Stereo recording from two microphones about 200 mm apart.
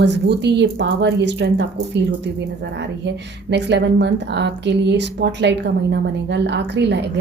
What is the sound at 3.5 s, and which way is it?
Speech, 60° right (ahead or behind).